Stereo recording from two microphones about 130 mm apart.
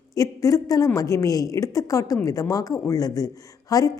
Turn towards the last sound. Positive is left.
turn(degrees=30)  # may be behind; listen again after turning